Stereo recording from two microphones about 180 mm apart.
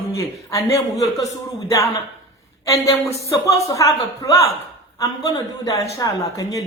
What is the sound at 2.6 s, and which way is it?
A woman's voice, 20° left (ahead or behind).